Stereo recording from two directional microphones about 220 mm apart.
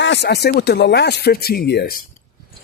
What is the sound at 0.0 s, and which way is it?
Speech, 50° left (ahead or behind).